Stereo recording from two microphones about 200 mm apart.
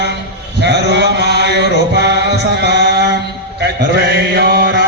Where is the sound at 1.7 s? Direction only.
55° right (ahead or behind).